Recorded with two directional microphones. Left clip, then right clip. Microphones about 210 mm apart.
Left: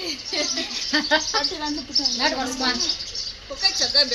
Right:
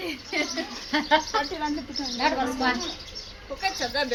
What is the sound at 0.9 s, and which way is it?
Speech, 45° left (ahead or behind).